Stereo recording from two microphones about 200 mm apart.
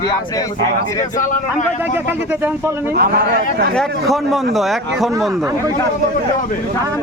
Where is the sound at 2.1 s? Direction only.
10° right (ahead or behind).